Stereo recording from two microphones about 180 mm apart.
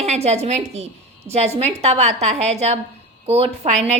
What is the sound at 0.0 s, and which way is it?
A woman's voice, 35° right (ahead or behind).